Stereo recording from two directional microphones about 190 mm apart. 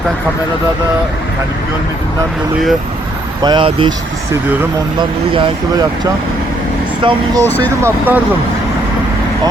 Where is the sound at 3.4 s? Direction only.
25° right (ahead or behind).